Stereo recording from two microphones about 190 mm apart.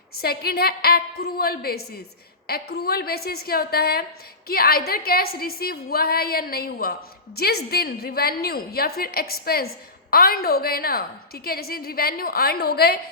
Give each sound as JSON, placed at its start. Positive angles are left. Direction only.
{"t": 0.2, "sound": "a woman's voice", "side_deg": 55}